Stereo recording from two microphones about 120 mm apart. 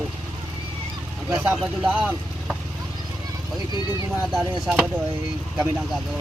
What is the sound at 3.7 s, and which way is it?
Speech, 35° left (ahead or behind).